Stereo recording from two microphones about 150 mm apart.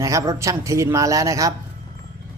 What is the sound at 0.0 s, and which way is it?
Speech, 20° right (ahead or behind).